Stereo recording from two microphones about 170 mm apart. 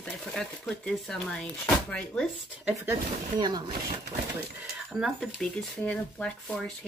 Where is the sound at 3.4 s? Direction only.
25° right (ahead or behind).